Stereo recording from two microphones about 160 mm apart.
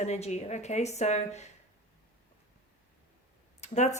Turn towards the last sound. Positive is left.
turn(degrees=45)  # may be behind; listen again after turning